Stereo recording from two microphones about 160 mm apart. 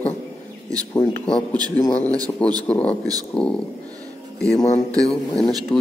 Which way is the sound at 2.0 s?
25° right (ahead or behind).